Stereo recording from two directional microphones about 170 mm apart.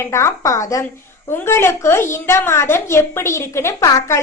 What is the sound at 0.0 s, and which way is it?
A woman's voice, 15° left (ahead or behind).